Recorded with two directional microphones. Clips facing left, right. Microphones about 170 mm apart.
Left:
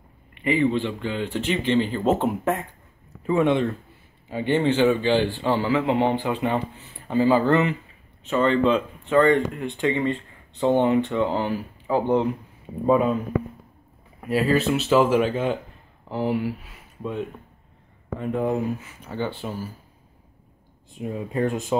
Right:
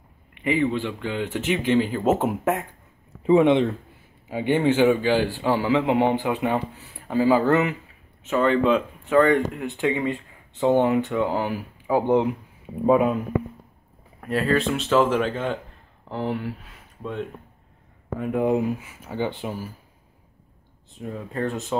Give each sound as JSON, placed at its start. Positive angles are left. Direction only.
{"t": 0.4, "sound": "a man's voice", "side_deg": -10}
{"t": 3.3, "sound": "speech", "side_deg": -20}
{"t": 14.2, "sound": "speech", "side_deg": 5}
{"t": 18.2, "sound": "speech", "side_deg": -10}
{"t": 21.0, "sound": "speech", "side_deg": 15}